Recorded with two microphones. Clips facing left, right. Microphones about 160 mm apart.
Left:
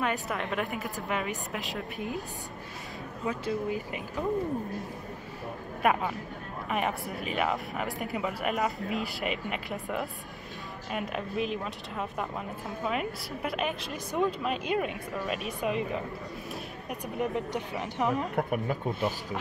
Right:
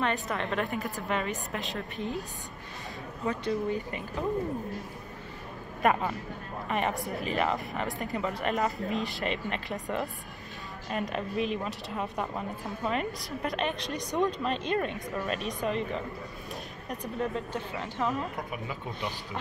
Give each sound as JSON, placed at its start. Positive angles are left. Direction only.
{"t": 0.0, "sound": "a woman's voice", "side_deg": 5}
{"t": 3.3, "sound": "a woman's voice", "side_deg": 5}
{"t": 5.8, "sound": "a woman's voice", "side_deg": 5}
{"t": 18.3, "sound": "speech", "side_deg": 55}